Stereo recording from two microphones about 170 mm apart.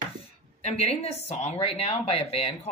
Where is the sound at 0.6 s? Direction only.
35° left (ahead or behind).